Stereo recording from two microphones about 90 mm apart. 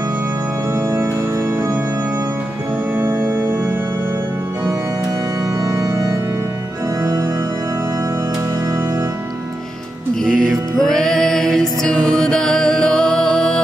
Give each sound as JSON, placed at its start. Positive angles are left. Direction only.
{"t": 0.7, "sound": "organ", "side_deg": -30}
{"t": 3.0, "sound": "organ", "side_deg": -25}
{"t": 5.6, "sound": "organ", "side_deg": -35}
{"t": 10.2, "sound": "music", "side_deg": 5}